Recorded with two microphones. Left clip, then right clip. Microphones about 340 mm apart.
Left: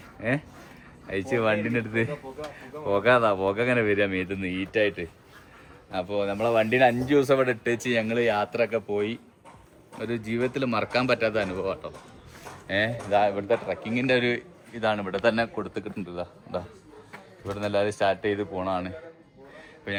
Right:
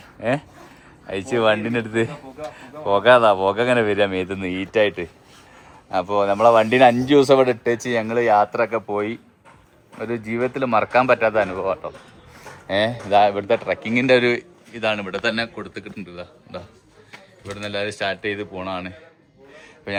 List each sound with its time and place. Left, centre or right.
0.2 s a man's voice: centre
7.8 s a man's voice: centre
10.0 s a man's voice: centre
12.6 s speech: centre
14.7 s a man's voice: centre
19.5 s a sound: centre